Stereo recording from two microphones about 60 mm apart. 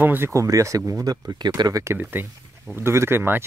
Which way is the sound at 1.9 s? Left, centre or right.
Right.